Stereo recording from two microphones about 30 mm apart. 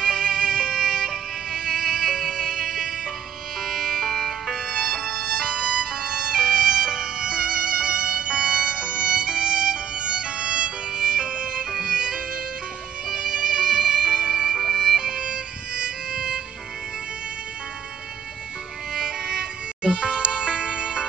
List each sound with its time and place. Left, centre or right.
0.0 s music: right
3.6 s music: centre
5.4 s music: right
14.6 s music: centre; by 16.3 s right
18.9 s music: right